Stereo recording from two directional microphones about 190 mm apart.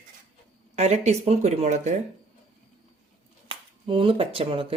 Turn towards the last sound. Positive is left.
turn(degrees=-30)  # may be behind; listen again after turning